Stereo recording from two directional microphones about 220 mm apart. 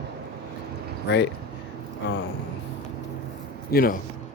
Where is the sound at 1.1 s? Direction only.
50° left (ahead or behind).